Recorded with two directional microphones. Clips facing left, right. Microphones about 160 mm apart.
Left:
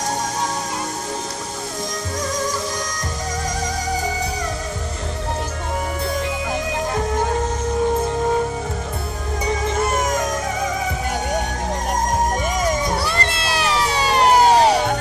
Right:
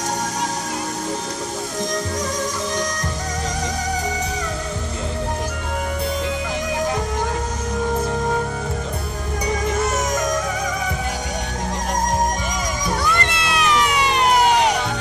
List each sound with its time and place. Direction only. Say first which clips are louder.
12.9 s music: even; 35° left (ahead or behind)